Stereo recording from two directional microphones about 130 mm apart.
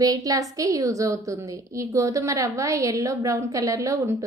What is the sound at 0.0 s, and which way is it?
A woman's voice, 30° right (ahead or behind).